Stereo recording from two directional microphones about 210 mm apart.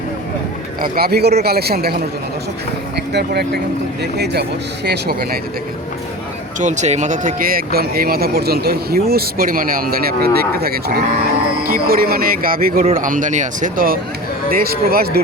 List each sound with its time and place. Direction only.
0.8 s speech: 45° right (ahead or behind)
3.1 s speech: 50° right (ahead or behind)
6.6 s speech: 35° right (ahead or behind)